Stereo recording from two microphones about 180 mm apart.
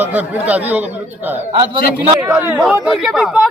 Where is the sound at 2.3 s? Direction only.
5° right (ahead or behind).